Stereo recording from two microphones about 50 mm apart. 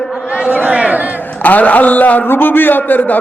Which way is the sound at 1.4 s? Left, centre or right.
Left.